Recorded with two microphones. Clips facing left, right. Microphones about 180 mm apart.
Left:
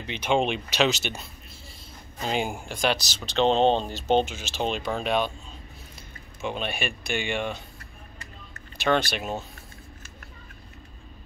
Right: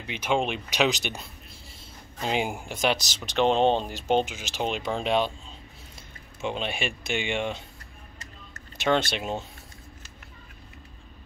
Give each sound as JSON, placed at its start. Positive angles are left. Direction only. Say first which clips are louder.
{"t": 0.0, "sound": "speech", "louder": "left 2 dB", "side_deg": -5}
{"t": 0.7, "sound": "speech", "louder": "left 1 dB", "side_deg": -15}
{"t": 2.2, "sound": "speech", "louder": "even", "side_deg": -10}
{"t": 4.9, "sound": "speech", "louder": "right 2 dB", "side_deg": -25}
{"t": 6.4, "sound": "speech", "louder": "even", "side_deg": -25}
{"t": 8.7, "sound": "speech", "louder": "even", "side_deg": -20}